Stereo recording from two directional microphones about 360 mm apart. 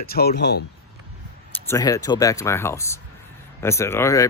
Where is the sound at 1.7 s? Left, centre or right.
Centre.